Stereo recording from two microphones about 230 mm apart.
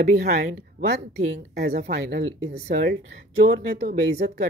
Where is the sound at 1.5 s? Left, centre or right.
Right.